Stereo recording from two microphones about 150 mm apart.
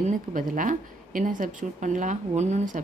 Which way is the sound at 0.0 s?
65° right (ahead or behind).